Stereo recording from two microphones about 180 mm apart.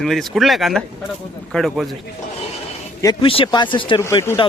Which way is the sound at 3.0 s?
25° left (ahead or behind).